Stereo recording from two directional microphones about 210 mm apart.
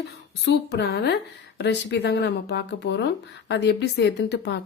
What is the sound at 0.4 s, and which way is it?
Speech, 50° left (ahead or behind).